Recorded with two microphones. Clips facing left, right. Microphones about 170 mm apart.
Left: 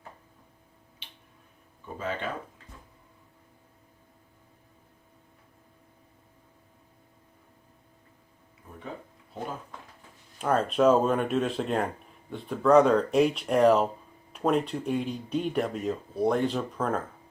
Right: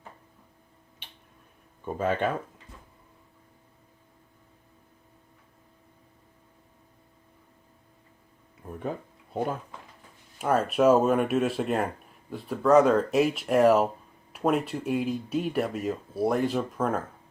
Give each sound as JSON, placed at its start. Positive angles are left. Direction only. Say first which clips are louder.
{"t": 1.0, "sound": "a sound", "louder": "right 2 dB", "side_deg": -50}
{"t": 2.0, "sound": "speech", "louder": "right 7 dB", "side_deg": -55}
{"t": 10.3, "sound": "speech", "louder": "right 1 dB", "side_deg": -5}